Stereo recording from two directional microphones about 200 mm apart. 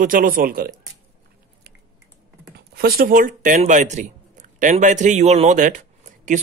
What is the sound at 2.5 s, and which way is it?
Speech, 50° right (ahead or behind).